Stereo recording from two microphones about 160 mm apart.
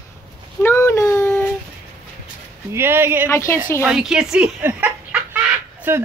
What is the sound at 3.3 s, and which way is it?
Speech, 20° left (ahead or behind).